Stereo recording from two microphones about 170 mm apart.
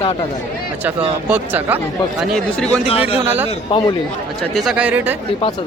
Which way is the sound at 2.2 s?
5° left (ahead or behind).